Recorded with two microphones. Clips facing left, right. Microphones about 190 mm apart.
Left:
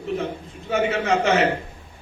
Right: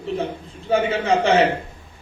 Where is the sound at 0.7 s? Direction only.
30° right (ahead or behind).